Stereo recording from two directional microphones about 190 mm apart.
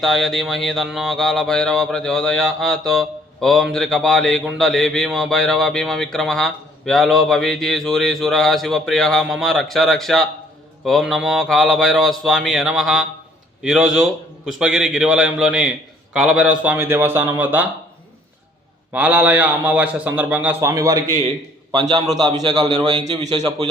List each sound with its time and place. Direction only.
0.0 s a sound: centre (ahead or behind)
16.1 s a man's voice: 5° right (ahead or behind)
18.9 s a man's voice: 10° right (ahead or behind)
23.0 s a man's voice: 35° right (ahead or behind)
23.3 s a man's voice: 20° right (ahead or behind)